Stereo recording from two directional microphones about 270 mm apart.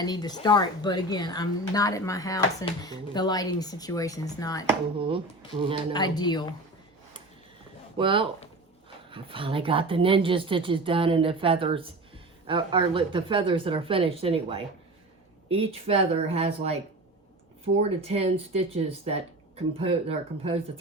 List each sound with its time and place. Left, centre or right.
0.0 s speech: centre
4.9 s speech: centre
5.9 s speech: centre
7.9 s speech: centre
17.7 s speech: right